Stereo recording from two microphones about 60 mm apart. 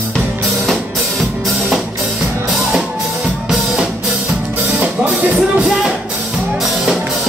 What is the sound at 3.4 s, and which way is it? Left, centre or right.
Music, centre.